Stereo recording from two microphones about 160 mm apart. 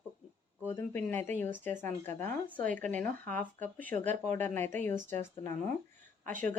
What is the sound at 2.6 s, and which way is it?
Speech, 55° right (ahead or behind).